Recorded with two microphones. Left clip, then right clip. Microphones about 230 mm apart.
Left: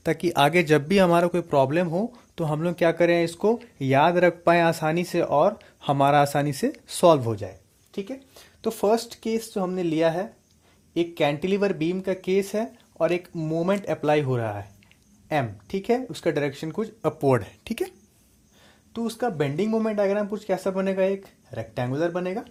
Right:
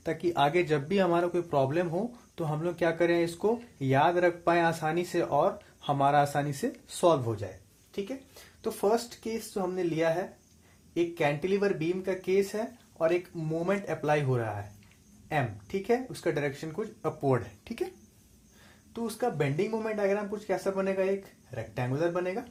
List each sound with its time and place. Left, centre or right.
0.0 s speech: left
8.6 s speech: left
18.9 s speech: left